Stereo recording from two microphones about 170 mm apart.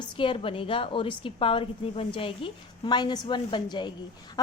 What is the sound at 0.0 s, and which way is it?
A woman's voice, 30° left (ahead or behind).